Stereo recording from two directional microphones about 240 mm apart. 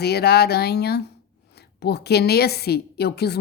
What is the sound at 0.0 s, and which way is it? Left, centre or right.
Speech, left.